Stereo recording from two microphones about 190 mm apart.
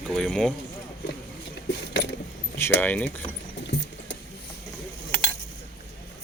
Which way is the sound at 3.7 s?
70° left (ahead or behind).